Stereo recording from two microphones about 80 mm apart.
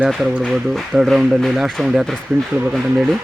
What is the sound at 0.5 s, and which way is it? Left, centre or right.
Speech, centre.